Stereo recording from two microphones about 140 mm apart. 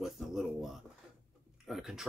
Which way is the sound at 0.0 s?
5° right (ahead or behind).